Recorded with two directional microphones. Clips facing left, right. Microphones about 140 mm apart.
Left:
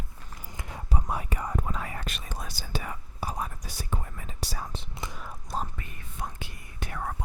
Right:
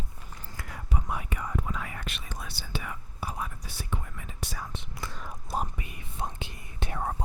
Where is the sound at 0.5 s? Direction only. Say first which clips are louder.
Left 2 dB; 20° left (ahead or behind).